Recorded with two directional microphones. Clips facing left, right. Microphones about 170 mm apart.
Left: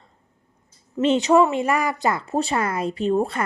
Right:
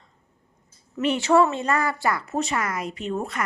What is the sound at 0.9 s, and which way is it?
Speech, 25° left (ahead or behind).